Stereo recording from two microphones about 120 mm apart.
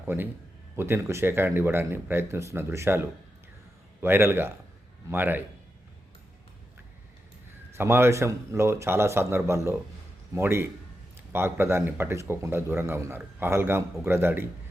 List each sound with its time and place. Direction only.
0.0 s a man's voice: 15° right (ahead or behind)
7.8 s speech: 20° right (ahead or behind)